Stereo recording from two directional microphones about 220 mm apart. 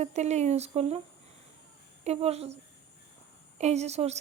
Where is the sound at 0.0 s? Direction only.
30° right (ahead or behind).